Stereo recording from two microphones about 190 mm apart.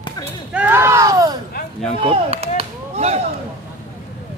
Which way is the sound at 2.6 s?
35° right (ahead or behind).